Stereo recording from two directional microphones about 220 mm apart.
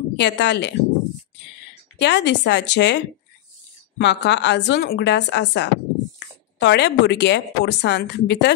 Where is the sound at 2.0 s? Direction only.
50° left (ahead or behind).